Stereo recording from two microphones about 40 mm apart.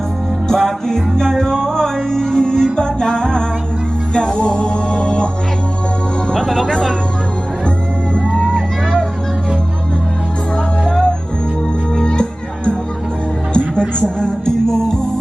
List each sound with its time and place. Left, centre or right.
0.4 s music: centre
6.3 s music: centre
8.5 s vehicle: centre
10.8 s music: centre
14.2 s music: centre